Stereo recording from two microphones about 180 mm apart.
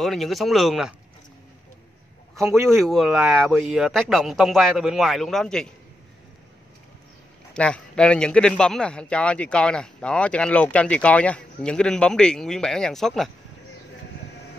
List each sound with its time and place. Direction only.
0.0 s speech: centre (ahead or behind)
2.3 s speech: 15° right (ahead or behind)
2.8 s speech: centre (ahead or behind)
7.5 s speech: 5° left (ahead or behind)